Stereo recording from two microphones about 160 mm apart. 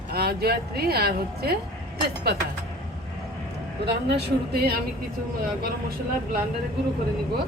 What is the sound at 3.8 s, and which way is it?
Speech, 90° right.